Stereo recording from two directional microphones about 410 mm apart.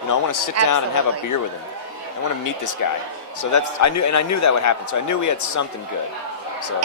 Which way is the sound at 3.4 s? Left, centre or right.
Left.